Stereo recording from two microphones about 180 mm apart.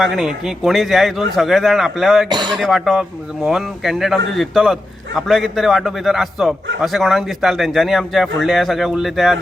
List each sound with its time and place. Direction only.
0.0 s speech: centre (ahead or behind)
2.3 s speech: 25° right (ahead or behind)
2.6 s speech: centre (ahead or behind)